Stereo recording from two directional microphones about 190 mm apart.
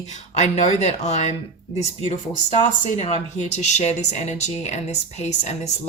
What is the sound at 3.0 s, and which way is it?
A woman's voice, 35° left (ahead or behind).